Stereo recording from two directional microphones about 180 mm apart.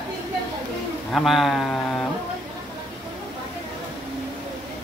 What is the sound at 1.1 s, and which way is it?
Speech, centre (ahead or behind).